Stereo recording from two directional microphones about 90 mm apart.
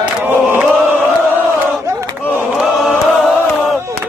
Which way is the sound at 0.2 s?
20° right (ahead or behind).